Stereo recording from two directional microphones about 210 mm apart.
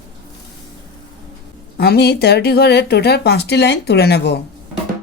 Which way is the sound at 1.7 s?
50° left (ahead or behind).